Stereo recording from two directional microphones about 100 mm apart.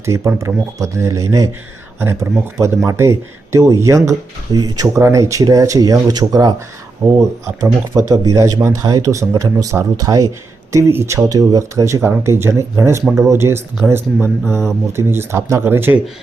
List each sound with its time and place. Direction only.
0.0 s speech: 30° right (ahead or behind)